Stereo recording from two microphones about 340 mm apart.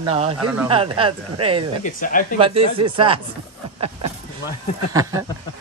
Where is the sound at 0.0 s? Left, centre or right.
Centre.